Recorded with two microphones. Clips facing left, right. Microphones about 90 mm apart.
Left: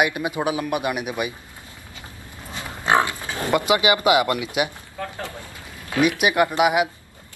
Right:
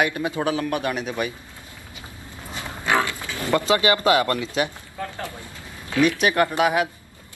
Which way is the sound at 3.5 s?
15° left (ahead or behind).